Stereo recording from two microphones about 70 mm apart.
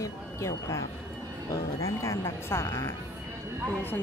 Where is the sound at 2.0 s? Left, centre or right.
Left.